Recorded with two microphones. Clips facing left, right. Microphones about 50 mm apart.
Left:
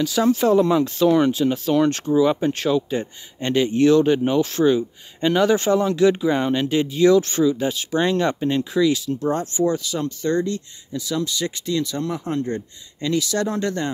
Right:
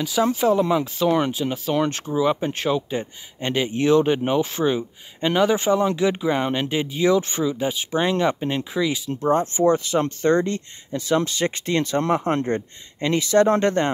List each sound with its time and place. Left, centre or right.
0.0 s speech: centre; by 13.8 s right